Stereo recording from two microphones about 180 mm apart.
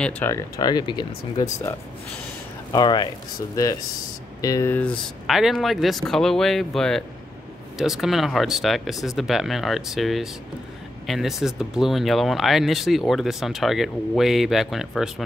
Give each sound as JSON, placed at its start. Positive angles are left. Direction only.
{"t": 0.0, "sound": "speech", "side_deg": 15}
{"t": 2.7, "sound": "speech", "side_deg": 25}
{"t": 4.4, "sound": "speech", "side_deg": 20}